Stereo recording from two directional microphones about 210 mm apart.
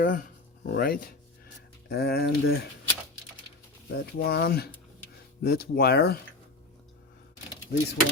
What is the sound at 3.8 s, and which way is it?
Speech, 50° left (ahead or behind).